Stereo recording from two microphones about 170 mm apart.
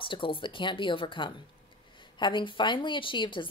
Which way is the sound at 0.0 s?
30° left (ahead or behind).